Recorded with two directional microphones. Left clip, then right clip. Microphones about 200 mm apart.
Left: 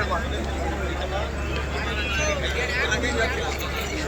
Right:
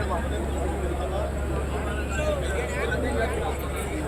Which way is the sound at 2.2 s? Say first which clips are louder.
Left 2 dB; 55° right (ahead or behind).